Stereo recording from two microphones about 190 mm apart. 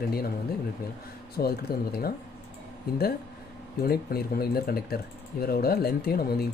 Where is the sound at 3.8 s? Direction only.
55° left (ahead or behind).